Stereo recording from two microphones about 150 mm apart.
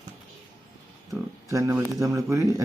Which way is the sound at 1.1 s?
20° right (ahead or behind).